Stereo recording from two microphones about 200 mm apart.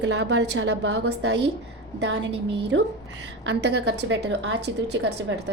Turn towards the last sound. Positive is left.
turn(degrees=-60)  # may be behind; listen again after turning